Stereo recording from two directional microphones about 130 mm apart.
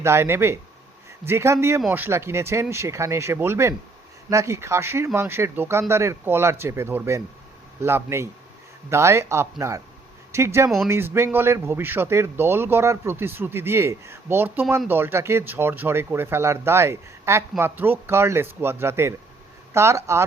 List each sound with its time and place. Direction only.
0.0 s a man's voice: 20° right (ahead or behind)